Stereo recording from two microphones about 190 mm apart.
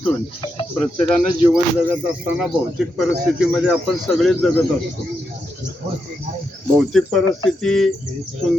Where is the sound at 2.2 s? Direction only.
Centre (ahead or behind).